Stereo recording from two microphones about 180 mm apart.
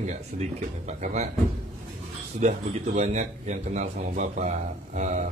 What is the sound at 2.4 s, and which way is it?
A man's voice, 40° right (ahead or behind).